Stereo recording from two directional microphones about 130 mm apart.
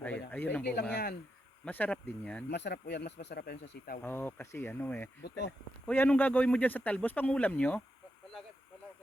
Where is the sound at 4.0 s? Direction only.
15° left (ahead or behind).